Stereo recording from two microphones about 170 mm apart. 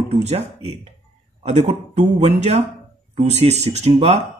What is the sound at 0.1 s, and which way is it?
Speech, 40° right (ahead or behind).